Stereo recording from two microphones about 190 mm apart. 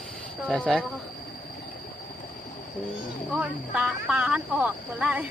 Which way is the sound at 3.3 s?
5° right (ahead or behind).